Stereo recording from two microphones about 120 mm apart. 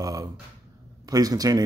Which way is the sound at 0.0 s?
30° right (ahead or behind).